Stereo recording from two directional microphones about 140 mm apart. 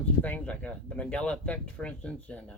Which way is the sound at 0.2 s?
10° left (ahead or behind).